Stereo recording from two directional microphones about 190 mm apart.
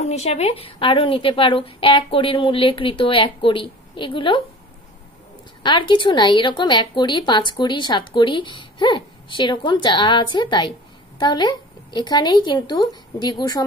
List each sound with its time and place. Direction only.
0.0 s a woman's voice: 35° left (ahead or behind)
5.6 s a woman's voice: 25° left (ahead or behind)